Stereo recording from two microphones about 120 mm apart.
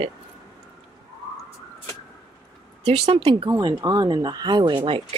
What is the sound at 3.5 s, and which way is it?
Speech, 35° right (ahead or behind).